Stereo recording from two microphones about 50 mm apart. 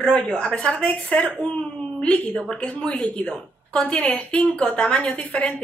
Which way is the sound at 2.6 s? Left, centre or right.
Centre.